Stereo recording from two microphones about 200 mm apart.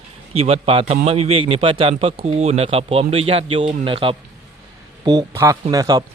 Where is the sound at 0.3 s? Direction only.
30° right (ahead or behind).